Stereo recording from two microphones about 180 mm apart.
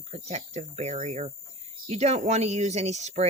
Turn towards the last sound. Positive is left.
turn(degrees=-40)  # may be behind; listen again after turning